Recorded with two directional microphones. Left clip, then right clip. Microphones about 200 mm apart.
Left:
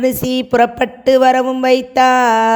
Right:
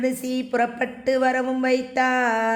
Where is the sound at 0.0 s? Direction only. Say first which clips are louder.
Left 9 dB; 35° left (ahead or behind).